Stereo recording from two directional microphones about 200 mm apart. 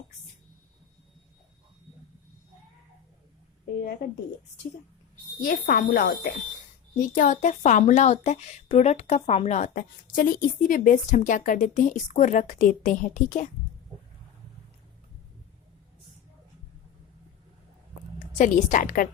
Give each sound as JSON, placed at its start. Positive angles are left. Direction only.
{"t": 5.4, "sound": "a woman's voice", "side_deg": 45}
{"t": 18.3, "sound": "a woman's voice", "side_deg": 40}